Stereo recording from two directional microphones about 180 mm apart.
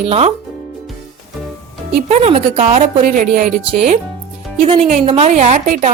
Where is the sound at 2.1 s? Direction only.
40° right (ahead or behind).